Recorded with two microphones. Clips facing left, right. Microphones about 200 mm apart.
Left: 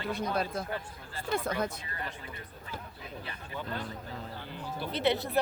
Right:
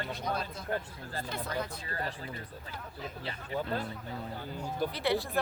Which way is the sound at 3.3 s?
35° right (ahead or behind).